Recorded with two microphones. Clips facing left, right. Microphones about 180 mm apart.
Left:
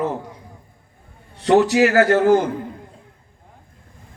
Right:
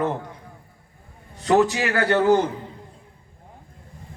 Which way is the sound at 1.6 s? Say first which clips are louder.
Left 9 dB; 40° left (ahead or behind).